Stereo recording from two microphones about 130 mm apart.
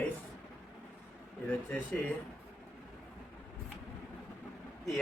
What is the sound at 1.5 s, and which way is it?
Speech, 10° left (ahead or behind).